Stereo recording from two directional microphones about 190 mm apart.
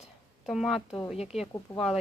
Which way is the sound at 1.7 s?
Centre (ahead or behind).